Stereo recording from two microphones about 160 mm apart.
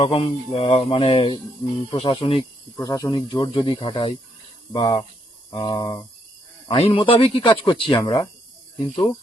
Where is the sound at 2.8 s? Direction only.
20° left (ahead or behind).